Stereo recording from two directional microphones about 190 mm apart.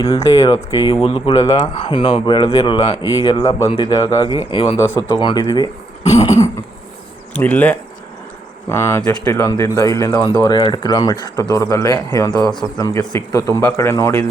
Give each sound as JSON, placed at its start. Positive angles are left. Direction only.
{"t": 0.2, "sound": "speech", "side_deg": 20}
{"t": 6.2, "sound": "a sound", "side_deg": 15}
{"t": 7.3, "sound": "speech", "side_deg": 10}
{"t": 12.4, "sound": "speech", "side_deg": 0}
{"t": 12.7, "sound": "speech", "side_deg": 15}